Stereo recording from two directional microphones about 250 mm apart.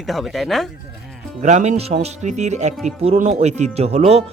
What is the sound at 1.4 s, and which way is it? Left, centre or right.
Speech, right.